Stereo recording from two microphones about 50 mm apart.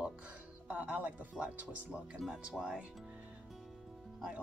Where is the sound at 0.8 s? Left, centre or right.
Right.